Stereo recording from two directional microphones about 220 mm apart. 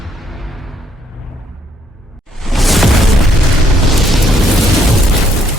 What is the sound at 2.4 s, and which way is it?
Music, centre (ahead or behind).